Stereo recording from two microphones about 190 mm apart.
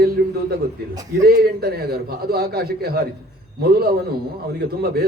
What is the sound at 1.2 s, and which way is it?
A man's voice, 55° right (ahead or behind).